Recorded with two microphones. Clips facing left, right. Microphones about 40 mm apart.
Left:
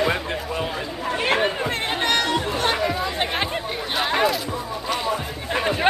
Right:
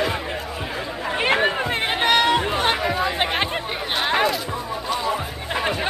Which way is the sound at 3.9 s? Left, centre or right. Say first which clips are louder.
Even; centre.